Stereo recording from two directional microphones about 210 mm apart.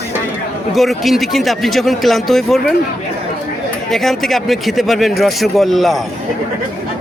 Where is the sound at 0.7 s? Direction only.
Centre (ahead or behind).